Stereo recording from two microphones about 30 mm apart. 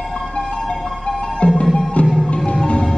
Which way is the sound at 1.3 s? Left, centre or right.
Left.